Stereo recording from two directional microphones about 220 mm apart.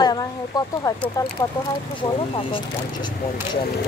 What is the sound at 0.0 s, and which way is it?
Speech, 20° left (ahead or behind).